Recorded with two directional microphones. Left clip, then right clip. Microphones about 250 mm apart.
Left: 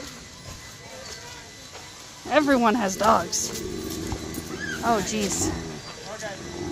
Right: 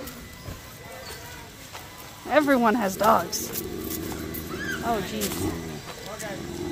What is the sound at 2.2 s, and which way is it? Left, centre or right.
Speech, centre.